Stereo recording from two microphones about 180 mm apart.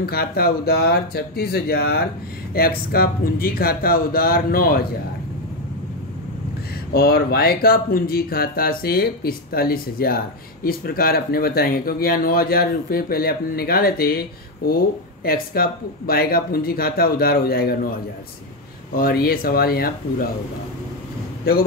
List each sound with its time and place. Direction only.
0.0 s speech: 55° left (ahead or behind)
6.9 s speech: 60° left (ahead or behind)
15.2 s speech: 55° left (ahead or behind)
18.9 s speech: 60° left (ahead or behind)